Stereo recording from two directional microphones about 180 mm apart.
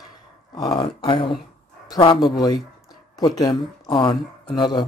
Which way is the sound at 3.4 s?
20° left (ahead or behind).